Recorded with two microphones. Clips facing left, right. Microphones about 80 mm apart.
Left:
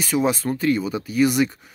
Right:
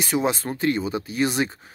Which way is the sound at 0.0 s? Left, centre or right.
Right.